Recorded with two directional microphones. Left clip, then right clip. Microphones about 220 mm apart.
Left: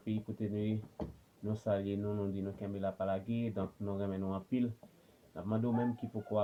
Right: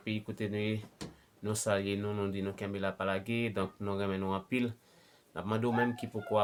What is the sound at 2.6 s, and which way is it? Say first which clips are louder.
Speech: even; 20° right (ahead or behind).